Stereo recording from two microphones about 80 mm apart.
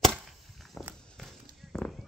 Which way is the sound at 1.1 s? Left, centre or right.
Centre.